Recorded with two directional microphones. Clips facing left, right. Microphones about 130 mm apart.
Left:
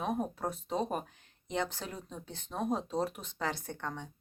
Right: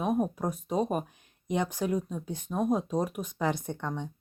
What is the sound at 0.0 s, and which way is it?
Speech, 15° right (ahead or behind).